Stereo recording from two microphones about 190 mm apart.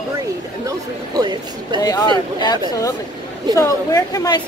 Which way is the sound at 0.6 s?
20° right (ahead or behind).